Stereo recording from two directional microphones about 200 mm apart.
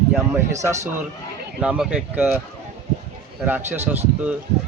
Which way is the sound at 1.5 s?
5° right (ahead or behind).